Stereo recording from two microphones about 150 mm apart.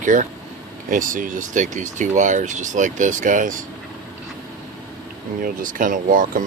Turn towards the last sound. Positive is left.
turn(degrees=-65)  # may be behind; listen again after turning